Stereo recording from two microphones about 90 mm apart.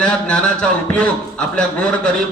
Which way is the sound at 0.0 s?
10° left (ahead or behind).